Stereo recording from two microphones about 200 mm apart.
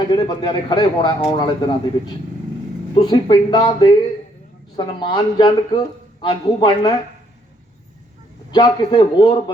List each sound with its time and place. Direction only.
0.1 s speech: 25° left (ahead or behind)
2.9 s speech: 20° left (ahead or behind)
8.4 s speech: 25° left (ahead or behind)